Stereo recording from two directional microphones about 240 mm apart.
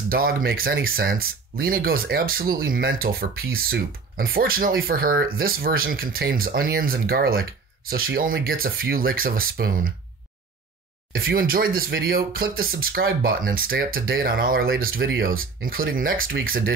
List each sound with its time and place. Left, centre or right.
0.1 s speech: right
11.1 s speech: right